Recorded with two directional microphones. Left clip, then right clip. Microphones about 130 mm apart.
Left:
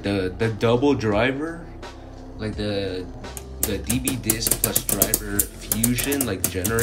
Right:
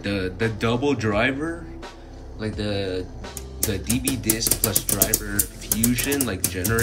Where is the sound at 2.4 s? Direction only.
Centre (ahead or behind).